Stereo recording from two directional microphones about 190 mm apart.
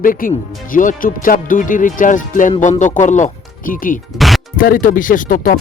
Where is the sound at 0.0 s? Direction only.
45° left (ahead or behind).